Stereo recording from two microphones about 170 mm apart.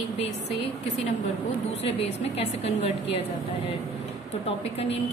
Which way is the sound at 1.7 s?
35° left (ahead or behind).